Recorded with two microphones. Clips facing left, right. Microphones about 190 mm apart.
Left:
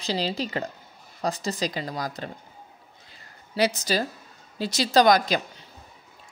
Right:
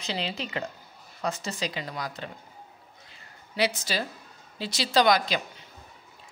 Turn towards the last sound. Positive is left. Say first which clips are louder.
# left 4 dB
turn(degrees=45)  # may be behind; listen again after turning